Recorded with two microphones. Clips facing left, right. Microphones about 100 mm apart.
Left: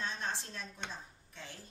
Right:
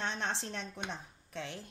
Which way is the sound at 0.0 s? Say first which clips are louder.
Right 3 dB; 75° right (ahead or behind).